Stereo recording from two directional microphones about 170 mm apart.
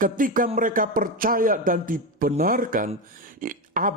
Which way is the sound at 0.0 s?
55° right (ahead or behind).